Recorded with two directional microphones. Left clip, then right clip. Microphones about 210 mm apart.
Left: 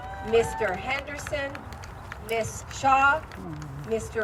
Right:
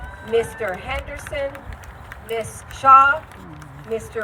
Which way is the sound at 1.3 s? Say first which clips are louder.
Right 3 dB; 60° right (ahead or behind).